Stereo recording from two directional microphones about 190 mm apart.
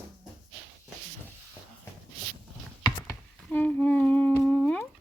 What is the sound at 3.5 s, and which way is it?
Humming, 10° left (ahead or behind).